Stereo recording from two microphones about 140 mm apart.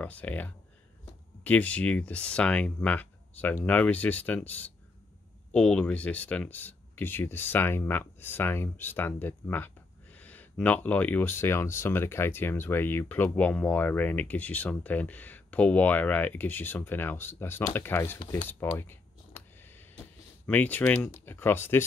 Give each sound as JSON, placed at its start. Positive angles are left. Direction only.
{"t": 0.0, "sound": "speech", "side_deg": 10}
{"t": 18.8, "sound": "a sound", "side_deg": 15}
{"t": 20.4, "sound": "speech", "side_deg": 10}